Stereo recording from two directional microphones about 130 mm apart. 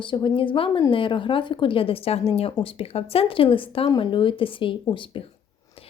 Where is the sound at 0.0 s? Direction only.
40° left (ahead or behind).